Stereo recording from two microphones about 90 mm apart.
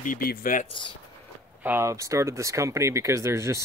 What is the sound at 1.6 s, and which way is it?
Speech, 20° right (ahead or behind).